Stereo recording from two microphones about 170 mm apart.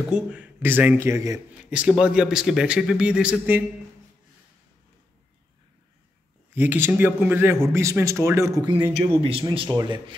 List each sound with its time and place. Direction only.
0.1 s speech: 10° right (ahead or behind)
1.6 s speech: 5° right (ahead or behind)
6.5 s speech: 10° right (ahead or behind)